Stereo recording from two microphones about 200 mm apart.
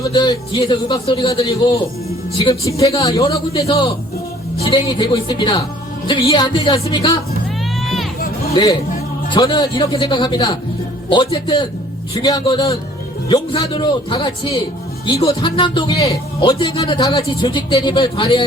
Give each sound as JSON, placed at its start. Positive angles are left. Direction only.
{"t": 0.0, "sound": "a man's voice", "side_deg": 20}
{"t": 4.7, "sound": "a man's voice", "side_deg": 25}
{"t": 8.6, "sound": "a man's voice", "side_deg": 20}